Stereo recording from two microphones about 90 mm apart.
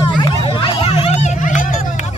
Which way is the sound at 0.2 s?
70° left (ahead or behind).